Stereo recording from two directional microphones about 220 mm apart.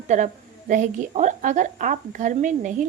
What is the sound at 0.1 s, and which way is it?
Speech, 30° right (ahead or behind).